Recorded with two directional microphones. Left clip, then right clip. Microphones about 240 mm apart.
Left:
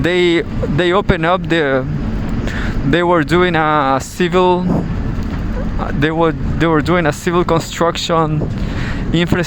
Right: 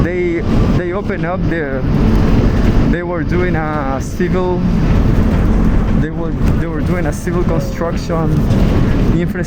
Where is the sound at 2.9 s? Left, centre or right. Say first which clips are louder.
Left 6 dB; left.